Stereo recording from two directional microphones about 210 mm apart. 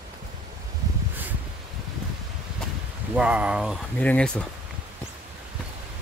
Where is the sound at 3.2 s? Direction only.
5° right (ahead or behind).